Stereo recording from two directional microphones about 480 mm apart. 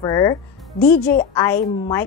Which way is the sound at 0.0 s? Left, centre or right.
Centre.